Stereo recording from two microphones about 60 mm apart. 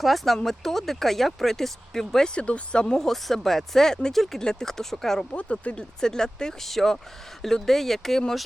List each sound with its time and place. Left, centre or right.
0.0 s speech: centre
3.0 s speech: centre
5.3 s speech: left
6.0 s speech: centre